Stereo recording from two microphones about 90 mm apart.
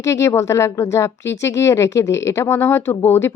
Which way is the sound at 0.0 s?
35° left (ahead or behind).